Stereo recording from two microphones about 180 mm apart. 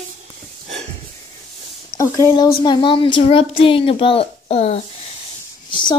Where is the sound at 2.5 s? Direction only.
25° left (ahead or behind).